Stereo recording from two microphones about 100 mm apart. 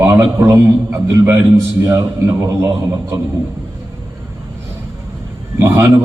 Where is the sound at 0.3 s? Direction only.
25° right (ahead or behind).